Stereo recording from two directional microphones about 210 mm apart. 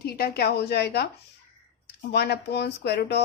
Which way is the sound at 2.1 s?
50° left (ahead or behind).